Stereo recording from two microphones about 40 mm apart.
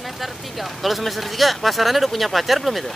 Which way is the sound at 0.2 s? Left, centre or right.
Centre.